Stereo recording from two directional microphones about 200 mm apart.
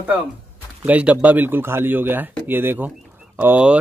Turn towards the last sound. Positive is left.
turn(degrees=-5)  # may be behind; listen again after turning